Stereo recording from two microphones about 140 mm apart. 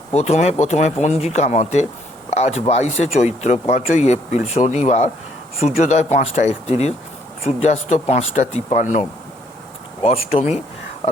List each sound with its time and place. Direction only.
0.1 s speech: 50° left (ahead or behind)
10.0 s speech: 45° left (ahead or behind)